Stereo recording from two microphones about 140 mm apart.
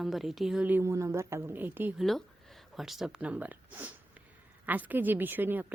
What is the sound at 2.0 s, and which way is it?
A woman's voice, centre (ahead or behind).